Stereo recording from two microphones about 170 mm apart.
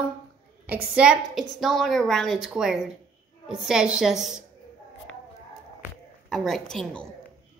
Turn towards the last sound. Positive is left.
turn(degrees=5)  # may be behind; listen again after turning